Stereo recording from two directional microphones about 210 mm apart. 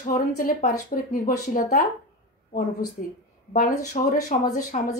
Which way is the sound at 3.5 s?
35° left (ahead or behind).